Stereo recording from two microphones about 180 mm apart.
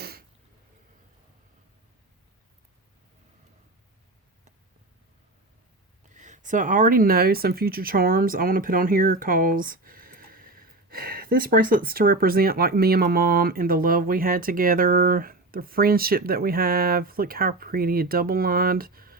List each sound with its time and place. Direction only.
0.0 s throat clearing: 60° right (ahead or behind)
6.1 s speech: 40° right (ahead or behind)